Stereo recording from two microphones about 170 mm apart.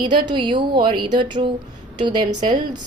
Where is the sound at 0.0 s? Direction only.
25° right (ahead or behind).